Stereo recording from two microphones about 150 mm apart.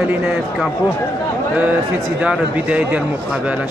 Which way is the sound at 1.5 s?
10° right (ahead or behind).